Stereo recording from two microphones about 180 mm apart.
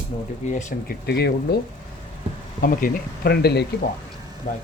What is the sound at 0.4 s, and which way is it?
Speech, 50° left (ahead or behind).